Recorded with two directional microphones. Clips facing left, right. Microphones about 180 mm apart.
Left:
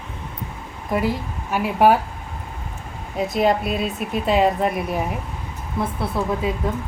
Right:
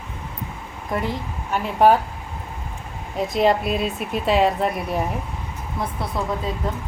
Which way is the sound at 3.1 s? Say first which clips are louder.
Even; centre (ahead or behind).